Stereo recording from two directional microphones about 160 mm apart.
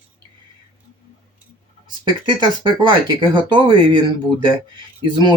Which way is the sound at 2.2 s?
30° right (ahead or behind).